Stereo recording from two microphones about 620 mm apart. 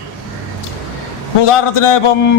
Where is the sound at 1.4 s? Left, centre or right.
Left.